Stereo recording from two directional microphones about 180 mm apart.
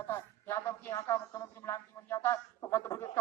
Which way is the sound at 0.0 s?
15° left (ahead or behind).